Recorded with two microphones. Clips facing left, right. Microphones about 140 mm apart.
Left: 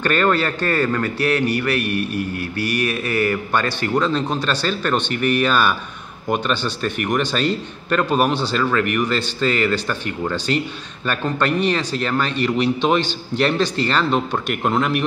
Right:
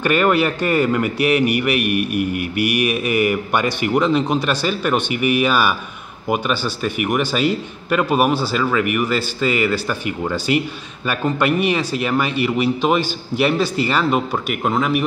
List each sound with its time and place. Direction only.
0.0 s a man's voice: 10° right (ahead or behind)